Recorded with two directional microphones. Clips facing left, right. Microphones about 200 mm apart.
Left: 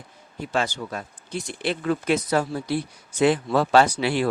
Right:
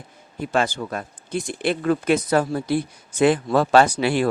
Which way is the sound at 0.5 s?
55° right (ahead or behind).